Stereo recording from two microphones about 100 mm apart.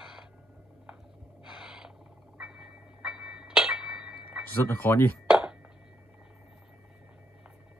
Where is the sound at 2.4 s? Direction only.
10° right (ahead or behind).